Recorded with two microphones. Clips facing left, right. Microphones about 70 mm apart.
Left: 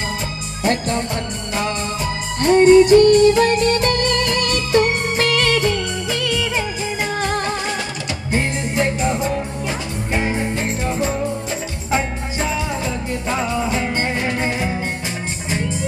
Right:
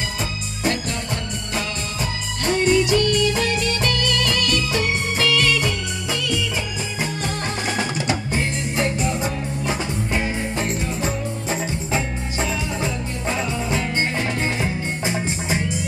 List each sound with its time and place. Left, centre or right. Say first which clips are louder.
2.4 s music: left 9 dB; left
8.4 s music: left 3 dB; left
13.7 s music: left 2 dB; left